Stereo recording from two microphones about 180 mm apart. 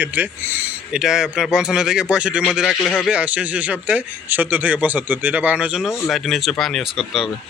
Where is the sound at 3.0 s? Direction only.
5° right (ahead or behind).